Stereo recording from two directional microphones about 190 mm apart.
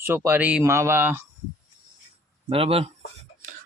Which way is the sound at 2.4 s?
30° right (ahead or behind).